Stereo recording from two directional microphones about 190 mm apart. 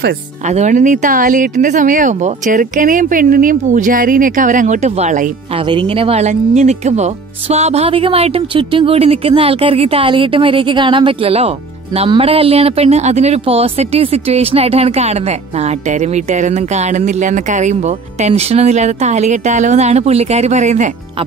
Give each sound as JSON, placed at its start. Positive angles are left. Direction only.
{"t": 0.5, "sound": "speech", "side_deg": -40}
{"t": 5.7, "sound": "speech", "side_deg": -30}